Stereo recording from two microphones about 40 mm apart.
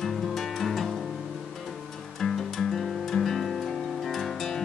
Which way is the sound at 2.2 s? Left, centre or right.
Centre.